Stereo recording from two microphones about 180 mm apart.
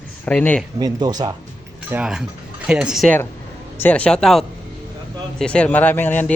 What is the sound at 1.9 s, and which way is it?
Speech, 5° right (ahead or behind).